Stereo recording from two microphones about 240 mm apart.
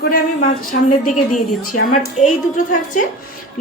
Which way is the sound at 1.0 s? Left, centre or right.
Left.